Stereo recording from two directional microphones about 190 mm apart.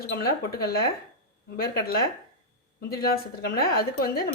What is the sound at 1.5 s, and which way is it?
A woman's voice, 55° left (ahead or behind).